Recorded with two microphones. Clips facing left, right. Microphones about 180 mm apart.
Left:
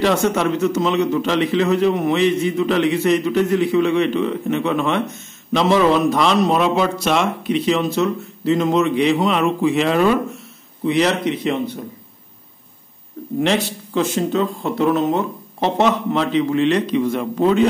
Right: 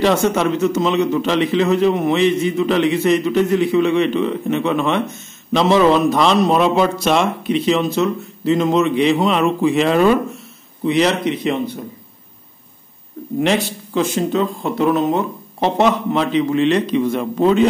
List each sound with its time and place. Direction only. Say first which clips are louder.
0.0 s a man's voice: right 2 dB; 20° right (ahead or behind); by 10.0 s 35° right (ahead or behind)
10.9 s a man's voice: right 1 dB; 20° right (ahead or behind)
13.4 s a man's voice: right 1 dB; 15° right (ahead or behind)